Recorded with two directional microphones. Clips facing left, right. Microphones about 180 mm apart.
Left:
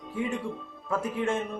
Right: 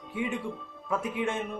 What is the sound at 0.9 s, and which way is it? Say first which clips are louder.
Speech: left 2 dB; centre (ahead or behind).